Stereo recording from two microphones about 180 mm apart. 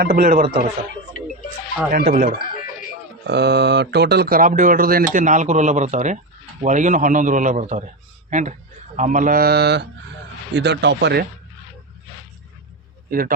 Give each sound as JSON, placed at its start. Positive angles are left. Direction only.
{"t": 0.0, "sound": "speech", "side_deg": -55}
{"t": 1.9, "sound": "speech", "side_deg": -55}
{"t": 3.2, "sound": "speech", "side_deg": -70}
{"t": 9.0, "sound": "mantra", "side_deg": -45}
{"t": 10.5, "sound": "speech", "side_deg": -70}
{"t": 13.1, "sound": "speech", "side_deg": -55}